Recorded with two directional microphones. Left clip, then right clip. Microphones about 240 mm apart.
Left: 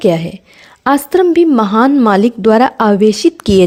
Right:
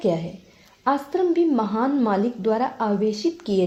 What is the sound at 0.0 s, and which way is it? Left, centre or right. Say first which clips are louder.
A woman's voice: left 11 dB; left.